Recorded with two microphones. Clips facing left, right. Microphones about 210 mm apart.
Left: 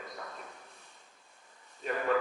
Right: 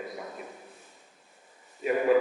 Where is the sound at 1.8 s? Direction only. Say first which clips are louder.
Right 7 dB; 10° right (ahead or behind).